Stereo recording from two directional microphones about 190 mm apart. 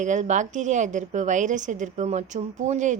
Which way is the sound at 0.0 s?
40° right (ahead or behind).